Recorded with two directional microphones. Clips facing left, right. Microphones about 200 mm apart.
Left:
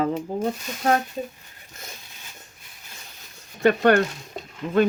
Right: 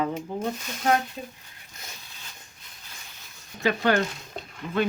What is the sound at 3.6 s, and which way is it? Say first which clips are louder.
Speech: left 6 dB; 55° left (ahead or behind).